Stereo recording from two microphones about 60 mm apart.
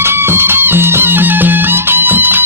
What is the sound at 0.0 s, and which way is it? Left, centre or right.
Music, right.